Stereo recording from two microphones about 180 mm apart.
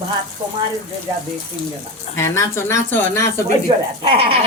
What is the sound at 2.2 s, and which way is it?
A man's voice, 15° left (ahead or behind).